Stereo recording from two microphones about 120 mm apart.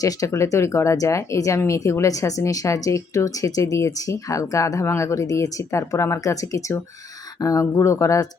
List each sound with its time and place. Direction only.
0.0 s speech: 25° left (ahead or behind)